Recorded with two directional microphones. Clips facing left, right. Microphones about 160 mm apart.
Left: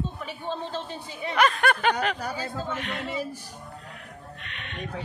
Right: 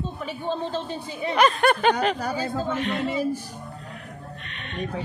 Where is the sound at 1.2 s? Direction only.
25° right (ahead or behind).